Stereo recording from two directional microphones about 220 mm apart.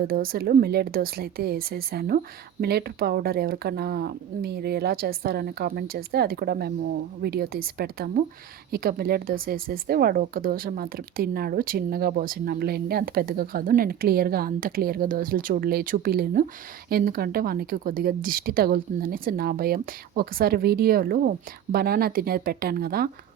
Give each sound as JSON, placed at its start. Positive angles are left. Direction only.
{"t": 0.0, "sound": "speech", "side_deg": -40}